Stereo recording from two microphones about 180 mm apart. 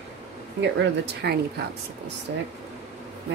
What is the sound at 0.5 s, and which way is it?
Speech, 70° right (ahead or behind).